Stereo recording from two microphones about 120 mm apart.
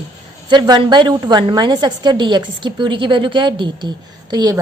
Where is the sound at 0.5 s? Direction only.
40° right (ahead or behind).